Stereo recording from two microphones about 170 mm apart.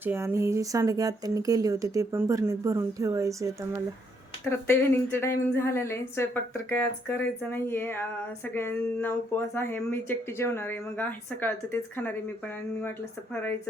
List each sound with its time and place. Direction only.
0.0 s speech: 10° right (ahead or behind)
4.4 s speech: 15° left (ahead or behind)